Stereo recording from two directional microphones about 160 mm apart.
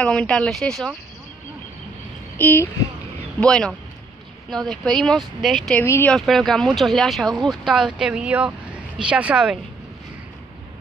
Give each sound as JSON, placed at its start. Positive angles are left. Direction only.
{"t": 0.0, "sound": "speech", "side_deg": 5}
{"t": 2.3, "sound": "speech", "side_deg": 10}
{"t": 3.3, "sound": "speech", "side_deg": 5}
{"t": 5.9, "sound": "speech", "side_deg": 15}
{"t": 6.1, "sound": "speech", "side_deg": 0}